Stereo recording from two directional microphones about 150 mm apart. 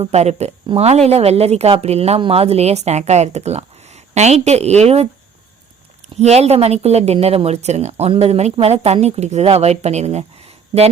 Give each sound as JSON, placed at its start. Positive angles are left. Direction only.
{"t": 0.0, "sound": "speech", "side_deg": -45}
{"t": 6.1, "sound": "speech", "side_deg": -45}